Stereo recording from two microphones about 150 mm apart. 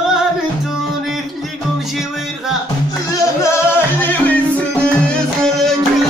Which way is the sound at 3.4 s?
20° left (ahead or behind).